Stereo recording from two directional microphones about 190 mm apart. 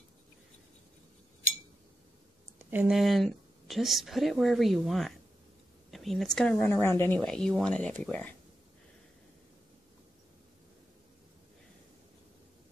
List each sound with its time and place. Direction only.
2.6 s speech: 10° right (ahead or behind)